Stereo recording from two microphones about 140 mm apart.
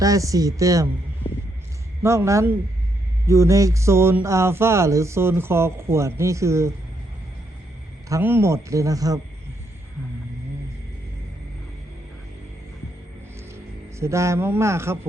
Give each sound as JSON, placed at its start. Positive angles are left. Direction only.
{"t": 0.0, "sound": "speech", "side_deg": -25}
{"t": 2.0, "sound": "speech", "side_deg": -20}
{"t": 8.1, "sound": "speech", "side_deg": -15}
{"t": 14.0, "sound": "speech", "side_deg": -20}